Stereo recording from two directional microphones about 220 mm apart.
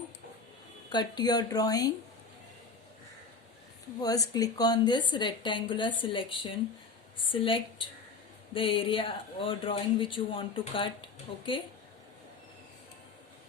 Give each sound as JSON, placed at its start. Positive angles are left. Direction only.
{"t": 0.9, "sound": "speech", "side_deg": 20}
{"t": 4.0, "sound": "a woman's voice", "side_deg": 15}